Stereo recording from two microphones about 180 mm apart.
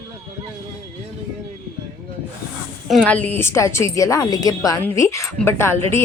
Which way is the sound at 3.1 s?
10° left (ahead or behind).